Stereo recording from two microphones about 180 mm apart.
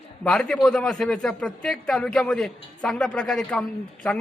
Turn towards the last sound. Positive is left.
turn(degrees=5)  # may be behind; listen again after turning